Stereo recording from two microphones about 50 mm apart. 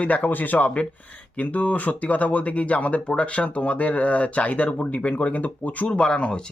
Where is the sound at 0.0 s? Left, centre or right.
Left.